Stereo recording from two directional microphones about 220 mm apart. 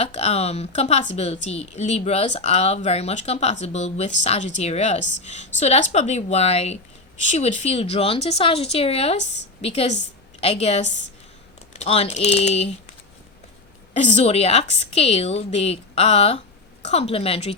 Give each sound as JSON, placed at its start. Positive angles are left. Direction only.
{"t": 0.0, "sound": "speech", "side_deg": 30}
{"t": 13.9, "sound": "speech", "side_deg": 30}